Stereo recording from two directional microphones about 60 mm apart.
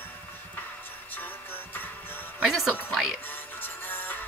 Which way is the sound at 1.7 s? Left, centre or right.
Left.